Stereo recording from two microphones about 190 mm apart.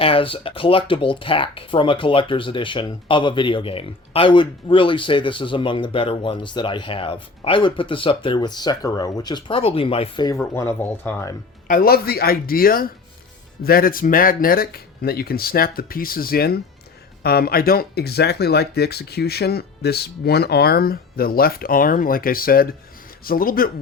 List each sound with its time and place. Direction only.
0.0 s speech: 30° left (ahead or behind)
10.4 s speech: 10° left (ahead or behind)
11.7 s speech: 50° left (ahead or behind)